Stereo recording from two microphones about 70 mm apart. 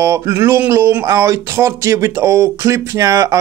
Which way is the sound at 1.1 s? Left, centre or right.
Right.